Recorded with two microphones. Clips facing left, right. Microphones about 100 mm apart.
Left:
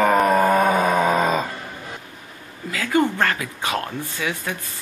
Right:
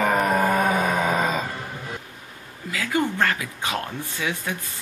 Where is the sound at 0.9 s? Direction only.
25° left (ahead or behind).